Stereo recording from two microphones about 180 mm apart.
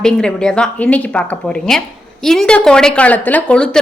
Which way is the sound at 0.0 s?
5° left (ahead or behind).